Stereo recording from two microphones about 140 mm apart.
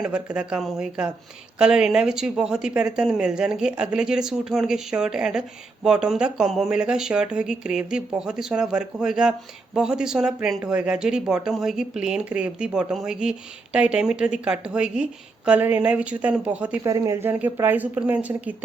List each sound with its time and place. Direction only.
0.0 s speech: 5° right (ahead or behind)